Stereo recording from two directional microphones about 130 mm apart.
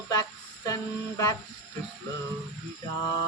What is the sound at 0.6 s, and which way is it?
Music, 30° left (ahead or behind).